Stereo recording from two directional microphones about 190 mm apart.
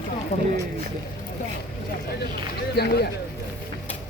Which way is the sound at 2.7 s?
60° left (ahead or behind).